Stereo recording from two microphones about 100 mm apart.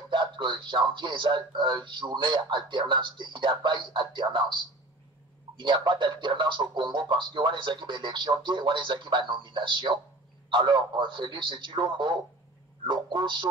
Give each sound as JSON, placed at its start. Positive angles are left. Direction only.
{"t": 0.1, "sound": "speech", "side_deg": -50}
{"t": 5.6, "sound": "speech", "side_deg": -50}
{"t": 12.8, "sound": "a sound", "side_deg": -55}